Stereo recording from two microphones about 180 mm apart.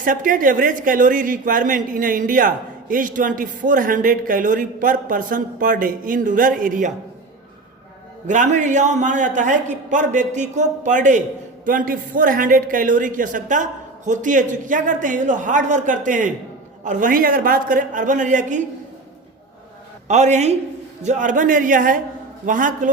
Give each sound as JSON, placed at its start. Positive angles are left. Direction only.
{"t": 0.0, "sound": "speech", "side_deg": -50}
{"t": 8.3, "sound": "speech", "side_deg": -45}
{"t": 20.1, "sound": "a man's voice", "side_deg": -40}